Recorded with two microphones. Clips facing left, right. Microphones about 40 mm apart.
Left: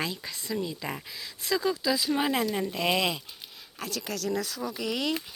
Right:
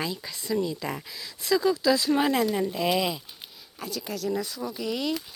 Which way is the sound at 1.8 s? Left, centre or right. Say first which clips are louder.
Right 5 dB; centre.